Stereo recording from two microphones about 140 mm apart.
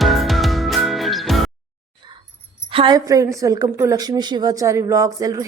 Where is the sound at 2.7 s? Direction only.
40° right (ahead or behind).